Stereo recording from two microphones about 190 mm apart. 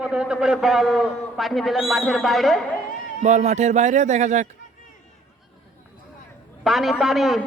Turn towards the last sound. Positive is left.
turn(degrees=0)  # may be behind; listen again after turning